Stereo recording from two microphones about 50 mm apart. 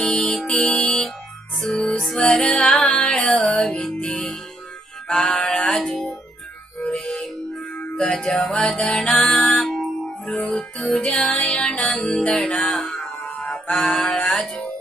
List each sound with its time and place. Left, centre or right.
0.0 s music: centre
7.0 s music: centre
8.3 s music: centre
10.1 s music: centre
13.8 s music: centre